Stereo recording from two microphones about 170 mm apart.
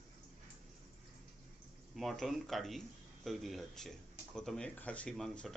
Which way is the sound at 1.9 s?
Centre (ahead or behind).